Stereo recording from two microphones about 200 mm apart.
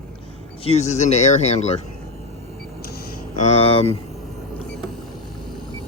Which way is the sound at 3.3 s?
35° left (ahead or behind).